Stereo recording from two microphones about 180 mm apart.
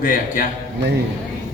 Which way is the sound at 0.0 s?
50° left (ahead or behind).